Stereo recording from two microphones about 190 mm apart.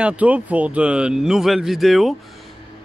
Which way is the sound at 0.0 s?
5° right (ahead or behind).